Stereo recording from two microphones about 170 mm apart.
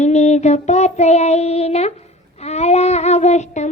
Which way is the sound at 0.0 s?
40° left (ahead or behind).